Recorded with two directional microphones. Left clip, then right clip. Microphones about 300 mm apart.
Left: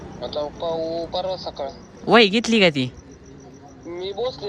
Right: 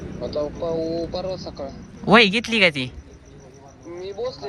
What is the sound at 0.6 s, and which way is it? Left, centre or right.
Speech, right.